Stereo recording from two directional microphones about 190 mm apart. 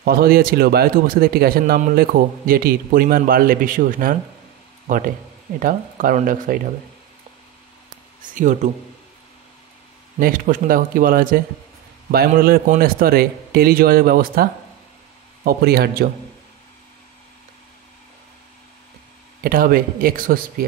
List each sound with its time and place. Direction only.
0.0 s a man's voice: 55° right (ahead or behind)
8.2 s speech: 40° right (ahead or behind)
10.1 s a man's voice: 45° right (ahead or behind)
19.4 s a man's voice: 50° right (ahead or behind)